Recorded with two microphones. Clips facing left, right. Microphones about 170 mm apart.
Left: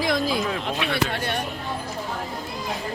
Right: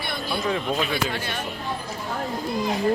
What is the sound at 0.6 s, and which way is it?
Speech, 75° left (ahead or behind).